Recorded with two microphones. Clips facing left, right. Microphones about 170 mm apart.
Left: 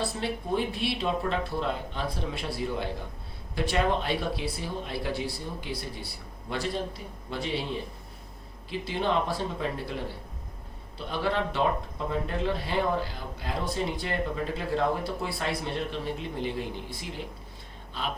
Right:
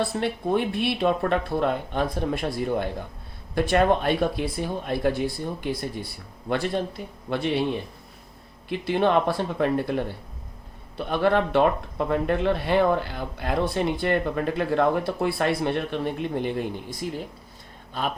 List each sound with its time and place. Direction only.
0.2 s speech: 60° right (ahead or behind)
7.3 s speech: 60° right (ahead or behind)
8.8 s speech: 60° right (ahead or behind)